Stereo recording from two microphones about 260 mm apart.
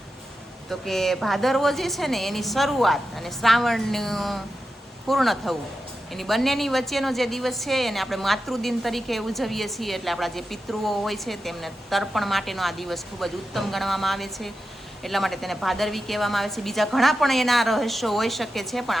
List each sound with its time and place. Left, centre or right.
0.7 s a woman's voice: centre